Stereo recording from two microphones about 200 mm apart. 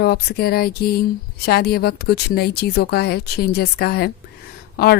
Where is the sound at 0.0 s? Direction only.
50° left (ahead or behind).